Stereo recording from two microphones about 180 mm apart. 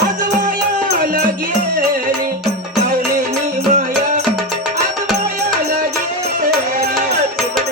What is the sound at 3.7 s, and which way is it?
Music, 50° right (ahead or behind).